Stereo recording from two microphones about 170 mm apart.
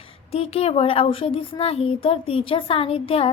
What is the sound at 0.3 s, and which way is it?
Speech, 35° left (ahead or behind).